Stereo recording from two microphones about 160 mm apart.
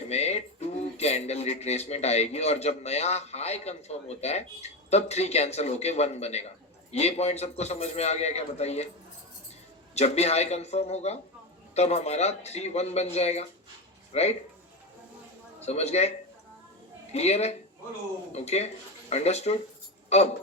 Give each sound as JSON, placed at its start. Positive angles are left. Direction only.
{"t": 0.1, "sound": "a sound", "side_deg": 40}
{"t": 0.9, "sound": "a man's voice", "side_deg": 40}
{"t": 9.9, "sound": "a man's voice", "side_deg": 40}
{"t": 15.6, "sound": "a man's voice", "side_deg": 40}